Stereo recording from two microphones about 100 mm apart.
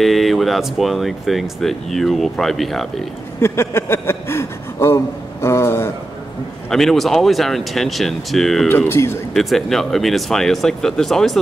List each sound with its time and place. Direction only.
0.0 s speech: centre (ahead or behind)
3.3 s speech: 25° left (ahead or behind)
6.7 s speech: 5° left (ahead or behind)
8.6 s speech: 25° left (ahead or behind)
9.3 s speech: centre (ahead or behind)